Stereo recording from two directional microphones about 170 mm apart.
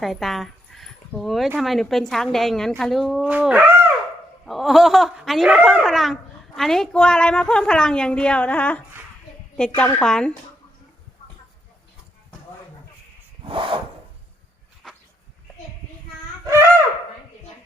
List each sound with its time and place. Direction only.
0.0 s a sound: centre (ahead or behind)
1.5 s a woman's voice: centre (ahead or behind)
13.4 s snort: 30° right (ahead or behind)